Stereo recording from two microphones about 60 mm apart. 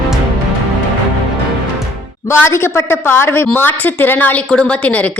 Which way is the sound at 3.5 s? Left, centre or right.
Left.